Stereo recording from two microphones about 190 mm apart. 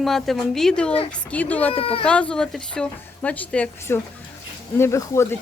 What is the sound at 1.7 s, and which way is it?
Speech, 30° left (ahead or behind).